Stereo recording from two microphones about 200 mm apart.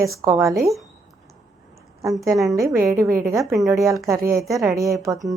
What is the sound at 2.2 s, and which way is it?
A woman's voice, 15° right (ahead or behind).